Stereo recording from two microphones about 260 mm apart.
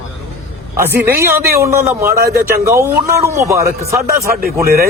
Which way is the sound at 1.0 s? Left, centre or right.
Right.